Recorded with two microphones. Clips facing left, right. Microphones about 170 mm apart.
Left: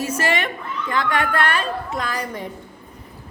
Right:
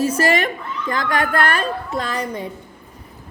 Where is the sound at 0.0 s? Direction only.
35° right (ahead or behind).